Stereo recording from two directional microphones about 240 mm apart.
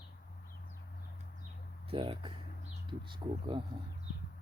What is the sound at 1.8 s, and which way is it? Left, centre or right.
Speech, right.